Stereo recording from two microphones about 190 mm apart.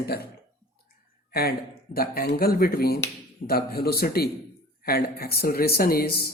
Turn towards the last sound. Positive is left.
turn(degrees=50)  # may be behind; listen again after turning